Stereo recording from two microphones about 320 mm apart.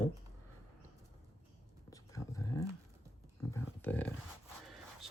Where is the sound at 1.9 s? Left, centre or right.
Centre.